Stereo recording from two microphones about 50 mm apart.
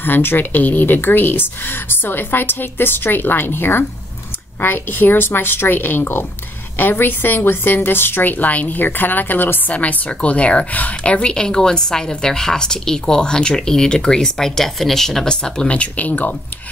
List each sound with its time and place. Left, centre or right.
0.0 s a woman's voice: left